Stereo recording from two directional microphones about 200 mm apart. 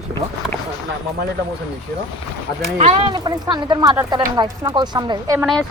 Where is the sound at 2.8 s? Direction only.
25° right (ahead or behind).